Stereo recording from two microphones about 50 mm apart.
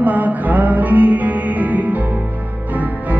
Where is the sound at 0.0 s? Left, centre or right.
Right.